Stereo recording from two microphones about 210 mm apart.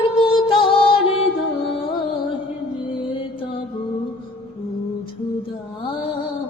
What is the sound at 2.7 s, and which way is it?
Music, 25° left (ahead or behind).